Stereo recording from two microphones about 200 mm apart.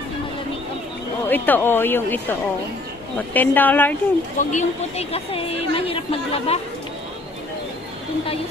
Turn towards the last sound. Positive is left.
turn(degrees=30)  # may be behind; listen again after turning